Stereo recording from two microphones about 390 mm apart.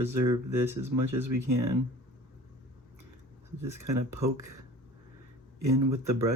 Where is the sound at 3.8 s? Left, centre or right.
Right.